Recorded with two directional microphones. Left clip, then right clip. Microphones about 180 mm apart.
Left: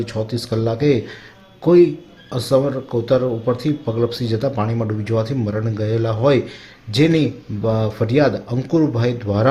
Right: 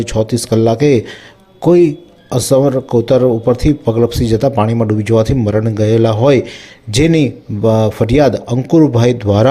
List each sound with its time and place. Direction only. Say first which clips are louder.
0.0 s speech: right 8 dB; 35° right (ahead or behind)